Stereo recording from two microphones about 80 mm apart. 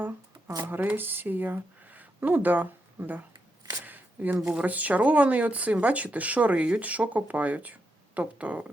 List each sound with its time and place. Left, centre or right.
0.6 s speech: right
3.8 s a sound: right
4.4 s a woman's voice: centre
4.6 s speech: centre